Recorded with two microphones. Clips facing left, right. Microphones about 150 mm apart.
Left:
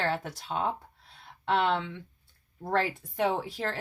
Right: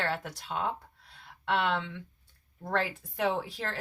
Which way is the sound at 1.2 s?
30° left (ahead or behind).